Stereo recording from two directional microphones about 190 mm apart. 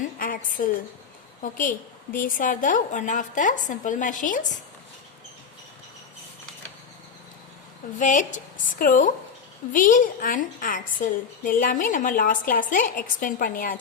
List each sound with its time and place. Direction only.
0.2 s a woman's voice: 45° left (ahead or behind)
7.9 s a woman's voice: 40° left (ahead or behind)